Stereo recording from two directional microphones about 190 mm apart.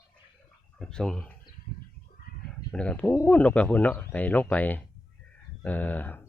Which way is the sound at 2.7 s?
5° left (ahead or behind).